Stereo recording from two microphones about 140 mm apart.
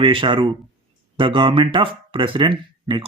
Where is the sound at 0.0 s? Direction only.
35° right (ahead or behind).